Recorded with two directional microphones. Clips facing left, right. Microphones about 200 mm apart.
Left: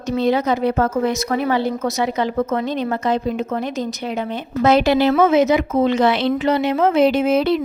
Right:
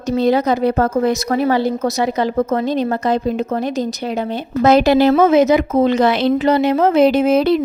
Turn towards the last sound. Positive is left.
turn(degrees=-40)  # may be behind; listen again after turning